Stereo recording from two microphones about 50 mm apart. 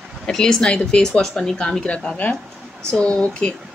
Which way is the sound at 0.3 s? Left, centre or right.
Centre.